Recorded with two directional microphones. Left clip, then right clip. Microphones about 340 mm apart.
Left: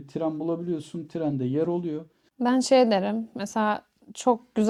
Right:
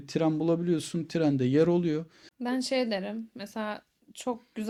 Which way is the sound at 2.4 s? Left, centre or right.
Left.